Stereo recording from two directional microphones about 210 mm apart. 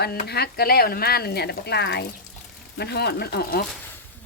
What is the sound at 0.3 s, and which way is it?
Speech, 50° left (ahead or behind).